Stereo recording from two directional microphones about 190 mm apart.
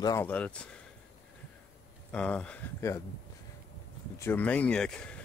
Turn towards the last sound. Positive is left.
turn(degrees=5)  # may be behind; listen again after turning